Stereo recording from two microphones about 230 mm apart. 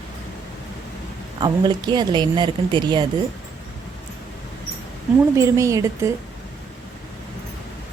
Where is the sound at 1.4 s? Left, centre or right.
Centre.